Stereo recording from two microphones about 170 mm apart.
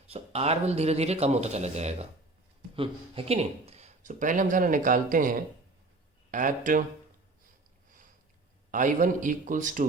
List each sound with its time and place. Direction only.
0.1 s speech: 35° right (ahead or behind)
8.7 s speech: 50° right (ahead or behind)